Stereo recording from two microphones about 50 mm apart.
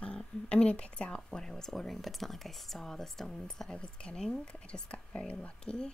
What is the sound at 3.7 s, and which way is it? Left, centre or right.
Speech, centre.